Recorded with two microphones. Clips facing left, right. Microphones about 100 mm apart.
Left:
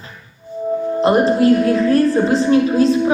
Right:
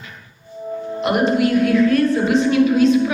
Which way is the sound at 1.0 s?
30° left (ahead or behind).